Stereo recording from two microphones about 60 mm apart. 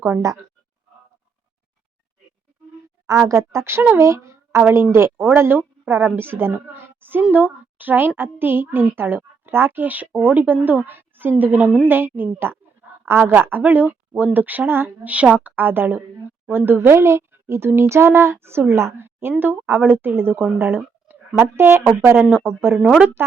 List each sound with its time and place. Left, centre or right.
3.2 s a child's voice: right
15.0 s a woman's voice: right
17.0 s a child's voice: right